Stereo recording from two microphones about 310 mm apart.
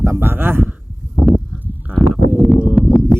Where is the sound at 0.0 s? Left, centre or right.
Centre.